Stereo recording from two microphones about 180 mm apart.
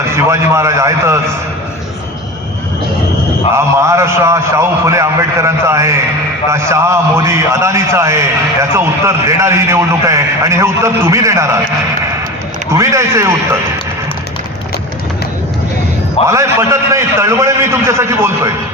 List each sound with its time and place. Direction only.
0.2 s a man's voice: 15° right (ahead or behind)
3.5 s a man's voice: 15° right (ahead or behind)
12.7 s a man's voice: 15° right (ahead or behind)
16.2 s a man's voice: 15° right (ahead or behind)